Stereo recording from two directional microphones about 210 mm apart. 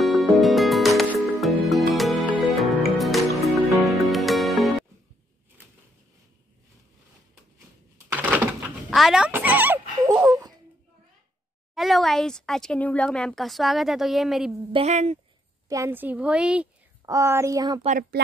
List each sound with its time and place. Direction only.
0.0 s music: centre (ahead or behind)
8.1 s a sound: 10° right (ahead or behind)
11.7 s speech: centre (ahead or behind)
14.7 s speech: 30° right (ahead or behind)
15.7 s a woman's voice: 10° right (ahead or behind)